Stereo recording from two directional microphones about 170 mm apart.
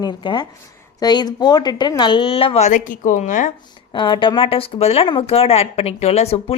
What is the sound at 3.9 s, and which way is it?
A woman's voice, 30° left (ahead or behind).